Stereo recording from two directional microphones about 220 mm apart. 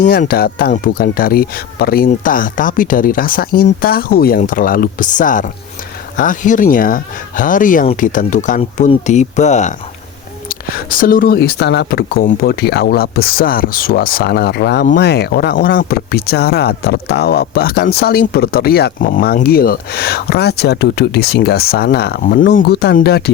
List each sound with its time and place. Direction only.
0.0 s speech: 40° left (ahead or behind)